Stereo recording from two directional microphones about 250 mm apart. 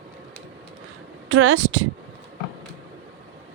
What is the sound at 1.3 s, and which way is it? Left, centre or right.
Speech, right.